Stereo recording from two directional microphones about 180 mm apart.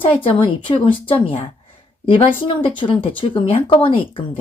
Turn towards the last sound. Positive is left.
turn(degrees=30)  # may be behind; listen again after turning